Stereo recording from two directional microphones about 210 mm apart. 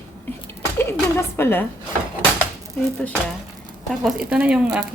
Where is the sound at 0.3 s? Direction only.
10° left (ahead or behind).